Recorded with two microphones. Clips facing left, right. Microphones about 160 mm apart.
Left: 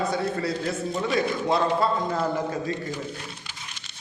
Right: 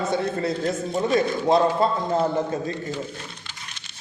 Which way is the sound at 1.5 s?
25° right (ahead or behind).